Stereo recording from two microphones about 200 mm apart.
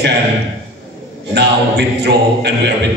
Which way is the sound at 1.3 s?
55° right (ahead or behind).